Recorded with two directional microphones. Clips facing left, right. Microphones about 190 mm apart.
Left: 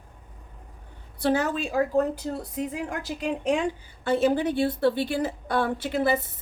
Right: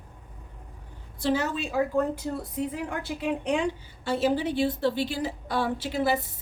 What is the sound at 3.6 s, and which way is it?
A woman's voice, 50° left (ahead or behind).